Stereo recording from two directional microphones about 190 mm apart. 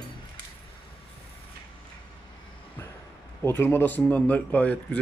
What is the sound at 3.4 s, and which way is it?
A man's voice, 10° left (ahead or behind).